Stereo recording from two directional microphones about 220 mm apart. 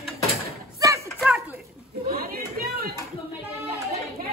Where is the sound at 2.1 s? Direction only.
40° right (ahead or behind).